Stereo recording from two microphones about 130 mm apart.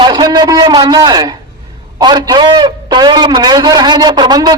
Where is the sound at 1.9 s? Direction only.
30° right (ahead or behind).